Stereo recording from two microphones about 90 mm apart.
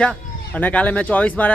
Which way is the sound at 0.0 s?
15° left (ahead or behind).